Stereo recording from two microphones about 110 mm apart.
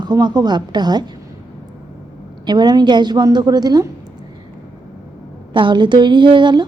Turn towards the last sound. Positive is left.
turn(degrees=-45)  # may be behind; listen again after turning